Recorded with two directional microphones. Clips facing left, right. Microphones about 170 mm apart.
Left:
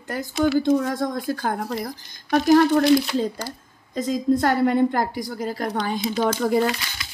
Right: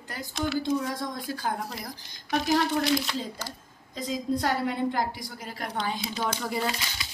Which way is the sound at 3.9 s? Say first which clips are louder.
Left 8 dB; 50° left (ahead or behind).